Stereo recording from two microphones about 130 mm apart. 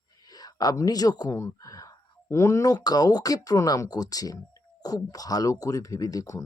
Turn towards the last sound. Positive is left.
turn(degrees=25)  # may be behind; listen again after turning